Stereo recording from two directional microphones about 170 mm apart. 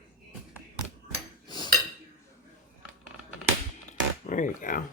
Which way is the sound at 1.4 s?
25° left (ahead or behind).